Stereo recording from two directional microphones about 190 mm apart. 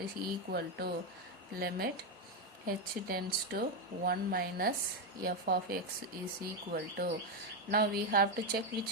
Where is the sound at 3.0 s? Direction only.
50° right (ahead or behind).